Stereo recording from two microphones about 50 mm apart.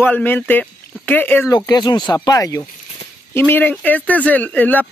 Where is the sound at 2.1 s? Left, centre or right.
Left.